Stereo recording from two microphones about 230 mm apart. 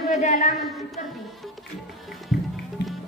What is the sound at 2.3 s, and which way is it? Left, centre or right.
Music, left.